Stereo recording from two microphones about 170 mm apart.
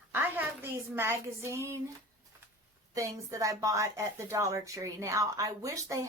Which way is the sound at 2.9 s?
20° right (ahead or behind).